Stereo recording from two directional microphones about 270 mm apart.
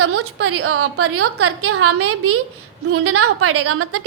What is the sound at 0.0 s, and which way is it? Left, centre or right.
A woman's voice, right.